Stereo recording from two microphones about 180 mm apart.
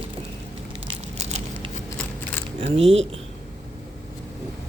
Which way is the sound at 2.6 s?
30° right (ahead or behind).